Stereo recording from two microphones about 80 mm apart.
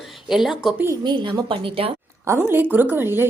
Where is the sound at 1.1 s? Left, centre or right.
Right.